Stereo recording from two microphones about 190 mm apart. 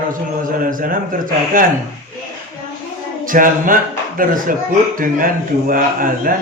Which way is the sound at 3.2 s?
45° right (ahead or behind).